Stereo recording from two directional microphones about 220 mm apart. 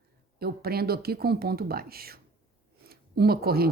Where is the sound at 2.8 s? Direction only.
45° right (ahead or behind).